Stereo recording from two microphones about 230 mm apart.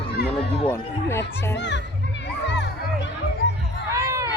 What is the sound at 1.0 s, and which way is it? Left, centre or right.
Speech, centre.